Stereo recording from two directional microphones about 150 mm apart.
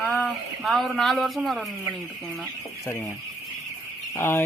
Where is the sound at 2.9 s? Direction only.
20° left (ahead or behind).